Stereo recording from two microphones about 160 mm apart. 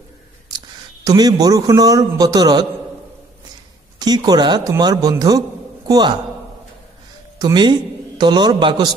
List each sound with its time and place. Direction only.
1.0 s a man's voice: 25° right (ahead or behind)
4.0 s a man's voice: 25° right (ahead or behind)
7.3 s a man's voice: 25° right (ahead or behind)